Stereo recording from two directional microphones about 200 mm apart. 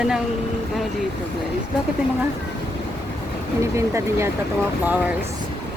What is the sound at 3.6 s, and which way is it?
Speech, 15° right (ahead or behind).